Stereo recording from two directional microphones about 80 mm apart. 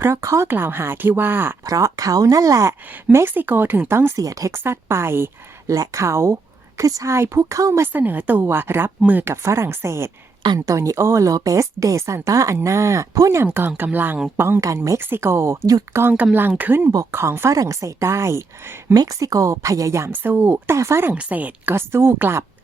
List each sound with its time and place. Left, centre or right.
0.0 s a woman's voice: right
1.6 s speech: right
3.1 s a woman's voice: right
4.2 s speech: right
4.5 s a woman's voice: right
5.7 s a woman's voice: right
9.3 s a woman's voice: right
16.1 s a woman's voice: right
18.9 s speech: right
20.1 s a woman's voice: right
20.7 s a woman's voice: right
21.2 s a woman's voice: centre